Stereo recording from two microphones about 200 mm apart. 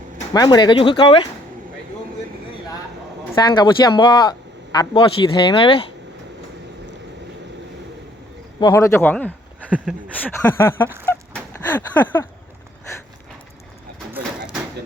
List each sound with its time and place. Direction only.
0.3 s speech: 20° left (ahead or behind)
3.3 s speech: 20° left (ahead or behind)
8.6 s speech: 15° left (ahead or behind)
9.6 s speech: 5° right (ahead or behind)
10.2 s speech: 10° left (ahead or behind)
11.0 s a sound: 10° left (ahead or behind)
14.1 s a sound: 5° right (ahead or behind)